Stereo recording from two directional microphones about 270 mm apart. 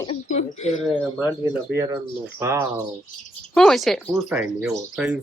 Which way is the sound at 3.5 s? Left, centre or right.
Centre.